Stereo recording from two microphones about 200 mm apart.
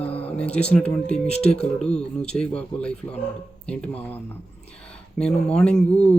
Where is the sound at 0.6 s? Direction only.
5° left (ahead or behind).